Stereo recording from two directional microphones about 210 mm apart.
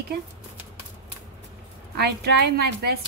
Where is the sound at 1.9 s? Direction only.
50° right (ahead or behind).